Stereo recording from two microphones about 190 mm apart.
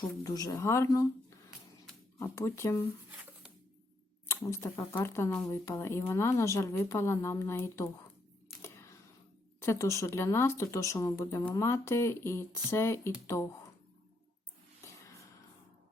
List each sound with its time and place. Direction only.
0.2 s speech: 20° left (ahead or behind)
2.1 s speech: 15° left (ahead or behind)
4.3 s speech: 15° left (ahead or behind)
9.6 s speech: 15° left (ahead or behind)
14.8 s a sound: 15° left (ahead or behind)